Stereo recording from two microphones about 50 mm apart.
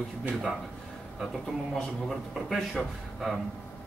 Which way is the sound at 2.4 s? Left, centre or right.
Centre.